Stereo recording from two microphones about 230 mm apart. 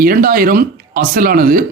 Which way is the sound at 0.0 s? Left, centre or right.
Right.